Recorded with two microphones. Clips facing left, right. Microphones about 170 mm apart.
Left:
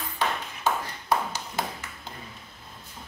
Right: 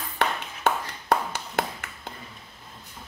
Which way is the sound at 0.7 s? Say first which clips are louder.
Right 2 dB; 65° right (ahead or behind).